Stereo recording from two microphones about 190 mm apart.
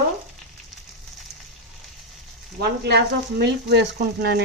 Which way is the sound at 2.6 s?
60° right (ahead or behind).